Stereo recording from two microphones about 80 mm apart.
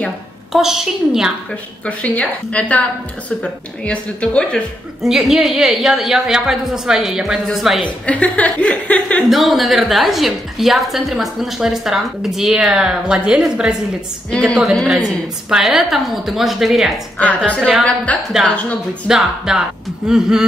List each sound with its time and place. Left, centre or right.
0.5 s a woman's voice: centre
1.9 s a woman's voice: centre
5.0 s a woman's voice: centre
8.1 s a woman's voice: centre
9.3 s a woman's voice: centre
14.3 s a woman's voice: centre
17.5 s a woman's voice: centre
19.0 s speech: centre